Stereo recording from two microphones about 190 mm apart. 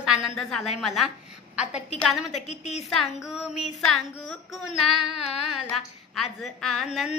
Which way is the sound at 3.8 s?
5° left (ahead or behind).